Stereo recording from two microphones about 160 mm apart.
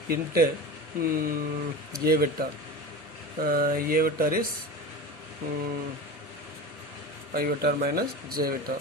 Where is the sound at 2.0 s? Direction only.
70° right (ahead or behind).